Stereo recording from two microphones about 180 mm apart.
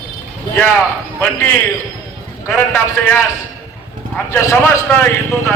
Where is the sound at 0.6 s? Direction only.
10° left (ahead or behind).